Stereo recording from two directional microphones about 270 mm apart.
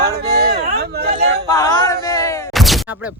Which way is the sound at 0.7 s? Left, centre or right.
Right.